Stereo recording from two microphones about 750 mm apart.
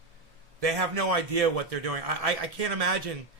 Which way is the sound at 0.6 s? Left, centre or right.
Right.